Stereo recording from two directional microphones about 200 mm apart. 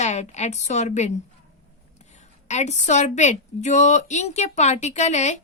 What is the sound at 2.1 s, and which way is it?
A woman's voice, 35° left (ahead or behind).